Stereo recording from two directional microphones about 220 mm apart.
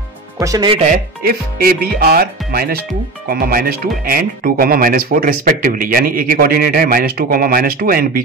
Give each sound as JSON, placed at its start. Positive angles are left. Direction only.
{"t": 0.4, "sound": "speech", "side_deg": -15}
{"t": 1.2, "sound": "speech", "side_deg": -45}